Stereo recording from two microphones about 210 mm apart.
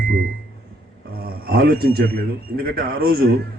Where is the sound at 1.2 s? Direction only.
45° right (ahead or behind).